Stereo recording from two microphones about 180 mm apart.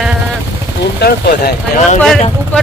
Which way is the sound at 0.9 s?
60° left (ahead or behind).